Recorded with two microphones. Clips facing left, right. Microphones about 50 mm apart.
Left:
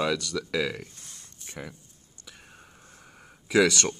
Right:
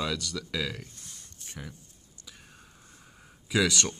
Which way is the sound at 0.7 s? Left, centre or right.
Left.